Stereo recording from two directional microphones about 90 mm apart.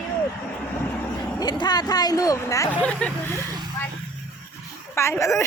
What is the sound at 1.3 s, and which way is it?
Speech, 50° left (ahead or behind).